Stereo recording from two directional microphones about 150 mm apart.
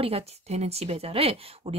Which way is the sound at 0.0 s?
45° right (ahead or behind).